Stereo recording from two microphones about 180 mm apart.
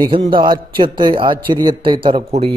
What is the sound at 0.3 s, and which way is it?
A man's voice, 25° right (ahead or behind).